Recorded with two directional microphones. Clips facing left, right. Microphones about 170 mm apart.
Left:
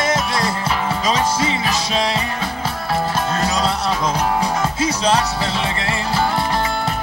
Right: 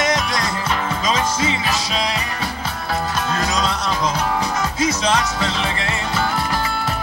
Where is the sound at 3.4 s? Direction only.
30° left (ahead or behind).